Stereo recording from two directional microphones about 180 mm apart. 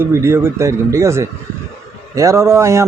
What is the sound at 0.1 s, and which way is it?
A man's voice, 15° right (ahead or behind).